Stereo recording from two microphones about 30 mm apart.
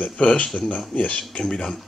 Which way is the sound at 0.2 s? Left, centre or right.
Left.